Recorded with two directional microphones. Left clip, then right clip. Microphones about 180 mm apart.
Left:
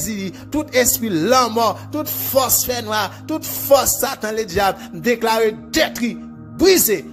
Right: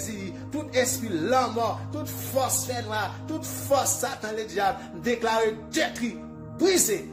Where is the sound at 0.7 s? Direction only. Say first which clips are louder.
Left 8 dB; 45° left (ahead or behind).